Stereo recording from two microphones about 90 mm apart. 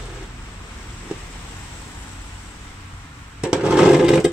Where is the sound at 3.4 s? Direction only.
10° right (ahead or behind).